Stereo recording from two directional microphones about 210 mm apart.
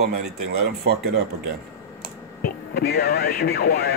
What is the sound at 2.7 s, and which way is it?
Speech, 50° left (ahead or behind).